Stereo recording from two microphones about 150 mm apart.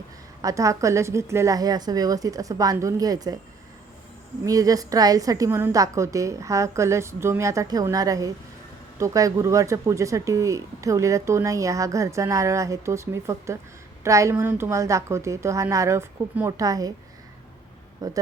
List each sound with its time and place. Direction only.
0.4 s speech: 20° right (ahead or behind)
4.4 s speech: 25° right (ahead or behind)
18.0 s speech: 25° right (ahead or behind)